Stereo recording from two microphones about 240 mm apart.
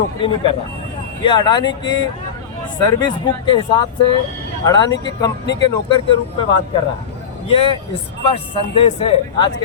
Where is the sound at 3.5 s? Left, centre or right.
Centre.